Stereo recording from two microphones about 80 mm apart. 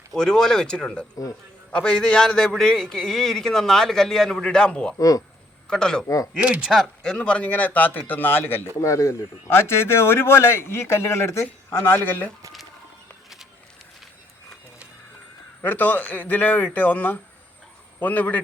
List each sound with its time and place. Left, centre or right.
0.1 s a man's voice: centre
4.9 s speech: left
5.6 s a man's voice: centre
6.3 s speech: centre
7.0 s a man's voice: centre; by 8.6 s left
8.8 s speech: left
15.6 s a man's voice: left